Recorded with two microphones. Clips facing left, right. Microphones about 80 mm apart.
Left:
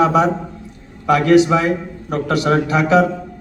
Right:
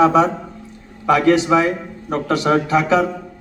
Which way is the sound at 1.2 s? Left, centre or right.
Right.